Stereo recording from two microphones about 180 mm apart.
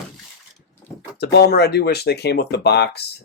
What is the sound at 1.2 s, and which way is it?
Speech, 65° left (ahead or behind).